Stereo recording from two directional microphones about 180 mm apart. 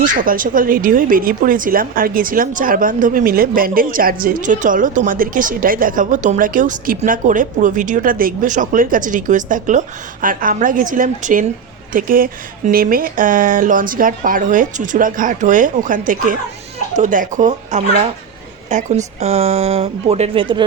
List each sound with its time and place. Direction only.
0.1 s speech: 50° right (ahead or behind); by 20.7 s 30° right (ahead or behind)